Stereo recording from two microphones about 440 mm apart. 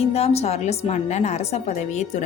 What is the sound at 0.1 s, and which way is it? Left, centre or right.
A woman's voice, centre.